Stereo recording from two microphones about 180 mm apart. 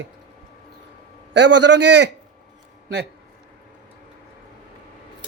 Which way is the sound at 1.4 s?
75° right (ahead or behind).